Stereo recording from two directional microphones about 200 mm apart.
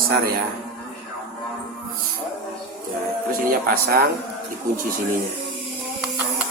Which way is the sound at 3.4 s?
50° right (ahead or behind).